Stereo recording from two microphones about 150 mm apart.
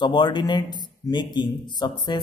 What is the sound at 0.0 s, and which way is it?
Speech, 30° left (ahead or behind).